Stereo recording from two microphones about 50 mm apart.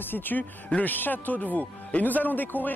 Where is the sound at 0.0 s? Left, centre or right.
Left.